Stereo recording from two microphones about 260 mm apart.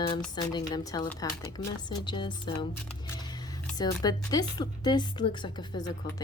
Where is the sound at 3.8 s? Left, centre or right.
Centre.